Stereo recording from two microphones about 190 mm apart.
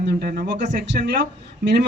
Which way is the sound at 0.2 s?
50° right (ahead or behind).